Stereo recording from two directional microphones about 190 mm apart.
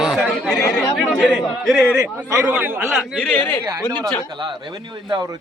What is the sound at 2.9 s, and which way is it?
Speech, centre (ahead or behind).